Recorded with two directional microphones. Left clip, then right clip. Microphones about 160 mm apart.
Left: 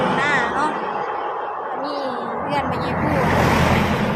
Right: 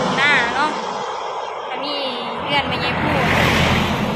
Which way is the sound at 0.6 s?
35° left (ahead or behind).